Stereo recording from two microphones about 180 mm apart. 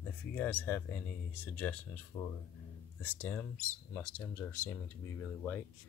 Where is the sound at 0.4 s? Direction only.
10° left (ahead or behind).